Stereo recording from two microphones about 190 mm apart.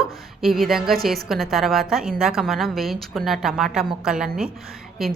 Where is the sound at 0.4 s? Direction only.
Centre (ahead or behind).